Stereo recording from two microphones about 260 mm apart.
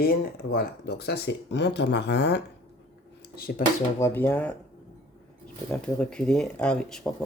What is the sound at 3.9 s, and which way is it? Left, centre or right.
Speech, centre.